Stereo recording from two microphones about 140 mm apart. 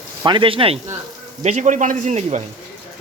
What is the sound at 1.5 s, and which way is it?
Speech, 55° right (ahead or behind).